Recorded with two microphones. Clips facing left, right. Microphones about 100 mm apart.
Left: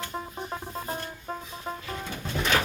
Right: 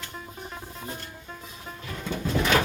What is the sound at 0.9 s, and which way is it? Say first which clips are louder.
Music: left 6 dB; 40° left (ahead or behind).